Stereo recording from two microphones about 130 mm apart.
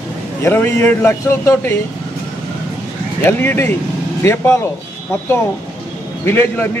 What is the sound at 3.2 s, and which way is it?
A man's voice, 15° left (ahead or behind).